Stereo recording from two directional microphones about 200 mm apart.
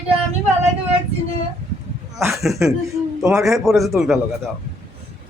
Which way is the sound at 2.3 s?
Centre (ahead or behind).